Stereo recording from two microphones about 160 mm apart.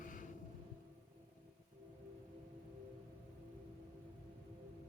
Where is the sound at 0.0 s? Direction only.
55° left (ahead or behind).